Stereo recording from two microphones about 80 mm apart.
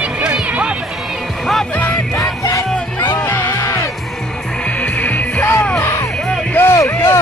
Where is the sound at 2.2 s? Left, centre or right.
Left.